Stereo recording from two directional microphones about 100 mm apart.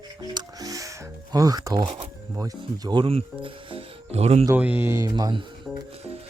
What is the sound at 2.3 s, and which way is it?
Speech, 40° right (ahead or behind).